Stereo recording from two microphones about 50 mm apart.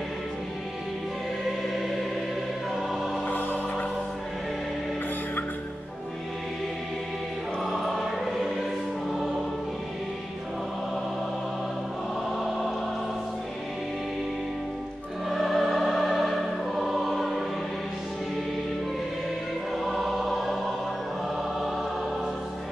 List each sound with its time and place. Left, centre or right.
3.3 s music: left
7.6 s choir: centre
12.4 s choir: centre
15.2 s music: centre
19.8 s choir: centre